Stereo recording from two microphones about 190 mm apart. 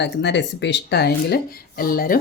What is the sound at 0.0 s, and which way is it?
A woman's voice, 65° left (ahead or behind).